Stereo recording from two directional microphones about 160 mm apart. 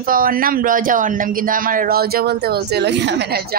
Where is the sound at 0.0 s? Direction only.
60° right (ahead or behind).